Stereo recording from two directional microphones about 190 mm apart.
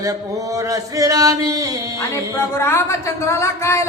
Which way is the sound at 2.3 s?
15° left (ahead or behind).